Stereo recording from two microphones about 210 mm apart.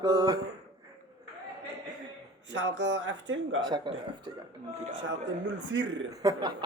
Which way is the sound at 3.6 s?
20° right (ahead or behind).